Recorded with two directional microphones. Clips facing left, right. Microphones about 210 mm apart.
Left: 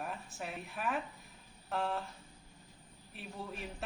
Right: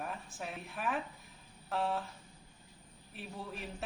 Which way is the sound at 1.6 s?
Centre (ahead or behind).